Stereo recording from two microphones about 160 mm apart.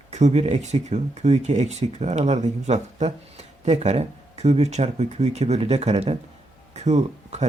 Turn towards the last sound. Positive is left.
turn(degrees=-45)  # may be behind; listen again after turning